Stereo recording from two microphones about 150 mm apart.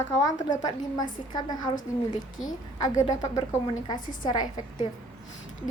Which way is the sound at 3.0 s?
25° left (ahead or behind).